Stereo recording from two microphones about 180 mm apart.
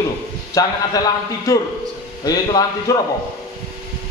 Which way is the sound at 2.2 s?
20° left (ahead or behind).